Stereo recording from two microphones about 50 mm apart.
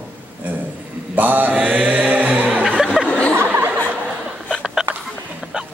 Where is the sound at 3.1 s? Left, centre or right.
Left.